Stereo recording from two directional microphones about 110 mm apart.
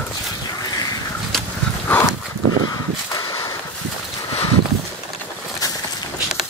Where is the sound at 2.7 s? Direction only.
35° left (ahead or behind).